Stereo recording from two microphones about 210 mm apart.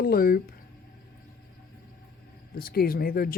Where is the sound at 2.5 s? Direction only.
45° left (ahead or behind).